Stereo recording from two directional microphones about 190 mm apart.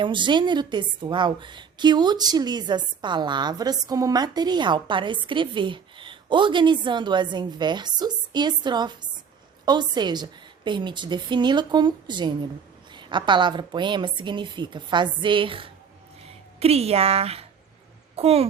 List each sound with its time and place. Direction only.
0.0 s a woman's voice: 25° right (ahead or behind)